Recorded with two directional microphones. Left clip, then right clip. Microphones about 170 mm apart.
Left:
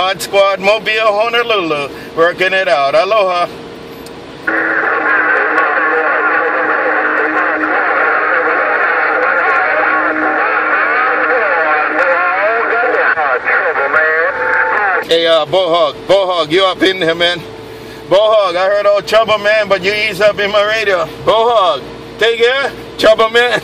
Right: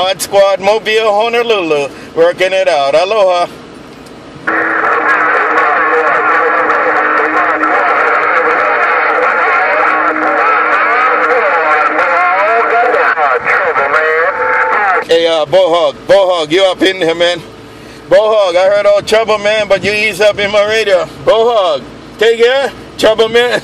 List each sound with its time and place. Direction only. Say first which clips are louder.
0.1 s speech: right 2 dB; 35° right (ahead or behind)
4.5 s music: right 2 dB; 45° right (ahead or behind)
18.3 s a man's voice: right 2 dB; 35° right (ahead or behind)